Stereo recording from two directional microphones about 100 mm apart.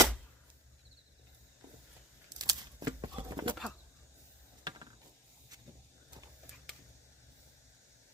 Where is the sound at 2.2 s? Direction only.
40° right (ahead or behind).